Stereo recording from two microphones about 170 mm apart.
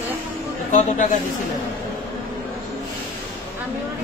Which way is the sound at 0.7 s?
45° left (ahead or behind).